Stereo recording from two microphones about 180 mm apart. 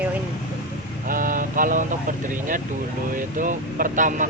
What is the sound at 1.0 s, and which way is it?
Speech, 50° right (ahead or behind).